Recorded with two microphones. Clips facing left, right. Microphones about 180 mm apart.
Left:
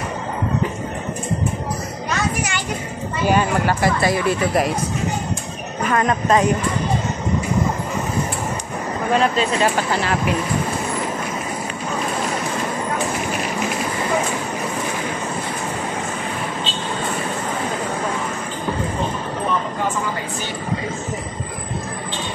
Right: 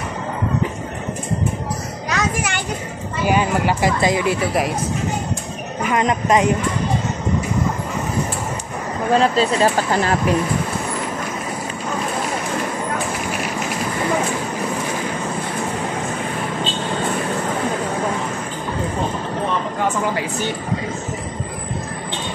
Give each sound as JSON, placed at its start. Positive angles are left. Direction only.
{"t": 2.0, "sound": "a sound", "side_deg": -55}
{"t": 3.3, "sound": "speech", "side_deg": -15}
{"t": 5.9, "sound": "speech", "side_deg": -15}
{"t": 9.1, "sound": "speech", "side_deg": -35}